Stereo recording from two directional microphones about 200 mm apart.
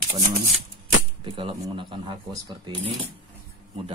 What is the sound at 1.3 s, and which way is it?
Speech, 25° right (ahead or behind).